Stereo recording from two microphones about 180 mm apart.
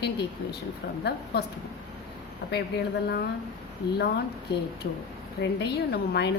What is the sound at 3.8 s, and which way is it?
Speech, 25° left (ahead or behind).